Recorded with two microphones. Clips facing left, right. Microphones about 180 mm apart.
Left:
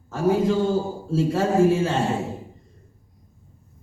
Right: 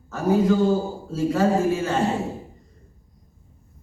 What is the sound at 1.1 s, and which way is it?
Speech, 30° left (ahead or behind).